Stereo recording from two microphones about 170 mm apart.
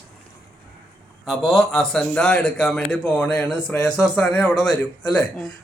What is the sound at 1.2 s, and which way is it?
Speech, centre (ahead or behind).